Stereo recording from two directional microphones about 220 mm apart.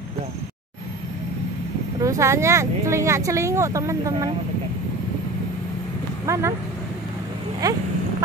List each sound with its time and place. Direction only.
2.0 s speech: 15° right (ahead or behind)
6.2 s speech: 15° right (ahead or behind)
7.6 s speech: 15° right (ahead or behind)